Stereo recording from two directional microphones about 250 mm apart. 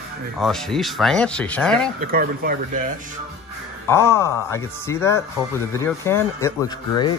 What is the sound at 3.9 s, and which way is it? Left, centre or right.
Speech, centre.